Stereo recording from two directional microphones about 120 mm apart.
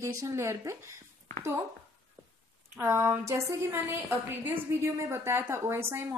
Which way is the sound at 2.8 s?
25° right (ahead or behind).